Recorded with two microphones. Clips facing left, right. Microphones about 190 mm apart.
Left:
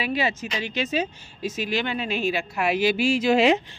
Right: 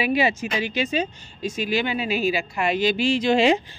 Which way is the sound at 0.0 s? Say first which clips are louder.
Right 4 dB; 10° right (ahead or behind).